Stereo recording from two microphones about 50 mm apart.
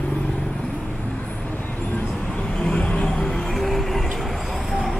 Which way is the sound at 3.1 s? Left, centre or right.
Centre.